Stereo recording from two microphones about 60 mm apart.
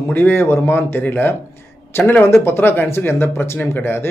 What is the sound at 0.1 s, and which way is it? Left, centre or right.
Speech, left.